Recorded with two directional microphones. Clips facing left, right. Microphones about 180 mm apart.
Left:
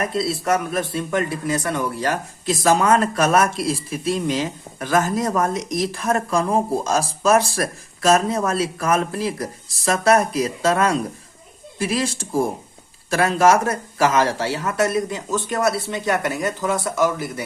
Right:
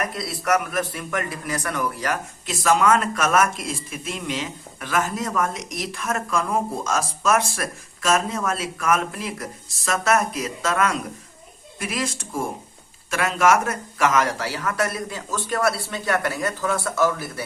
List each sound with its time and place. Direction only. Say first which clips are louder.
0.1 s a man's voice: left 3 dB; 25° left (ahead or behind)